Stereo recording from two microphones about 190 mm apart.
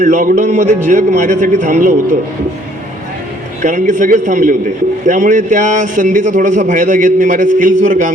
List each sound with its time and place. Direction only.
0.0 s a man's voice: 40° right (ahead or behind)
3.6 s a man's voice: 40° right (ahead or behind)